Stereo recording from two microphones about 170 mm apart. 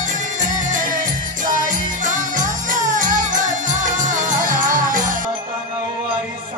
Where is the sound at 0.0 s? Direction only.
50° right (ahead or behind).